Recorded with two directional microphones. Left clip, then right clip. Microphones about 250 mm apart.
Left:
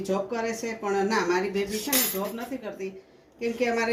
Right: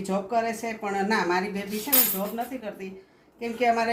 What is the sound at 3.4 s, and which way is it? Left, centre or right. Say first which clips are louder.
Mantra: right 2 dB; centre.